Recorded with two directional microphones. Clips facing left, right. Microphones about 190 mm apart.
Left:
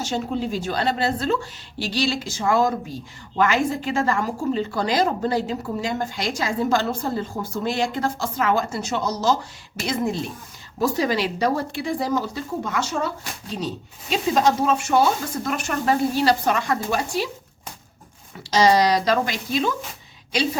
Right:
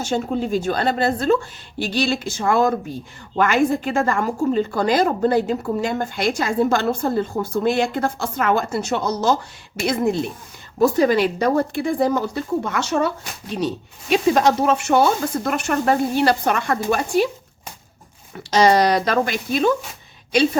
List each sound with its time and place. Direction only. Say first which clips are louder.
0.0 s speech: right 3 dB; 50° right (ahead or behind); by 13.1 s 65° right (ahead or behind)
14.1 s speech: right 4 dB; 65° right (ahead or behind)
18.3 s speech: right 2 dB; 60° right (ahead or behind)